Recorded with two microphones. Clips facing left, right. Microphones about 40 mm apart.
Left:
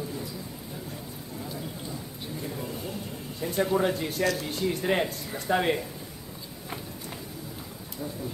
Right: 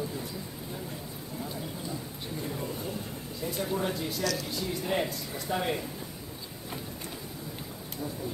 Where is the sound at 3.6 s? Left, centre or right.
Left.